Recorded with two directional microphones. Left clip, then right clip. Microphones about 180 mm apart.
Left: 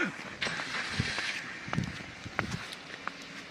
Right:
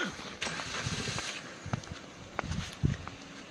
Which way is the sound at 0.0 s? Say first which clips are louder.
Left 3 dB; 50° right (ahead or behind).